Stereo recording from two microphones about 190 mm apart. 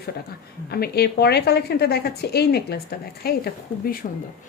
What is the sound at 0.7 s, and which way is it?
A woman's voice, 55° left (ahead or behind).